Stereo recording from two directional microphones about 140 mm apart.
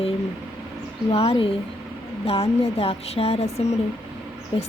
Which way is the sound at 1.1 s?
45° left (ahead or behind).